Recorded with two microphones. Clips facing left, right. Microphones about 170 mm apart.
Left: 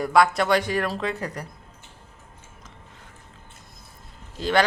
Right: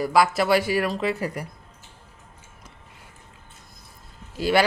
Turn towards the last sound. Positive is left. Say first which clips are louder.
# right 1 dB
turn(degrees=-10)  # may be behind; listen again after turning